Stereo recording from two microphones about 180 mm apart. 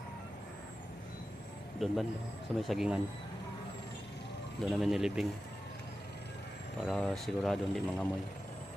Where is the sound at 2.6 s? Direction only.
Centre (ahead or behind).